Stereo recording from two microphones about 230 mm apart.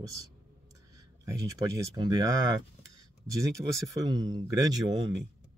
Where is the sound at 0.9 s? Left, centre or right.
Centre.